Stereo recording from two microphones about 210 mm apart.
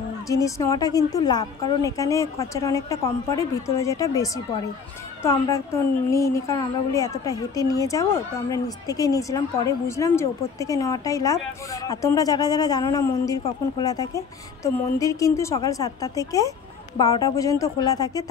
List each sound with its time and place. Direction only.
0.3 s speech: 15° left (ahead or behind)